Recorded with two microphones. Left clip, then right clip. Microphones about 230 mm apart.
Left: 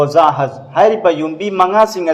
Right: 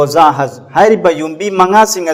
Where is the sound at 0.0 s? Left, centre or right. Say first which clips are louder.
Right 2 dB; right.